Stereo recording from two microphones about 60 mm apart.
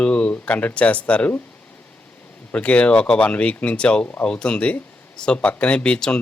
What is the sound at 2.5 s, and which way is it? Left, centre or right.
Speech, left.